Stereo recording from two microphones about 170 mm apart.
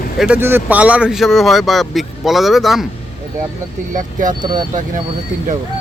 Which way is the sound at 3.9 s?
50° right (ahead or behind).